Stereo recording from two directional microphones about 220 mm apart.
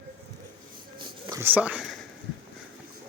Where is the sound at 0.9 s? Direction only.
20° right (ahead or behind).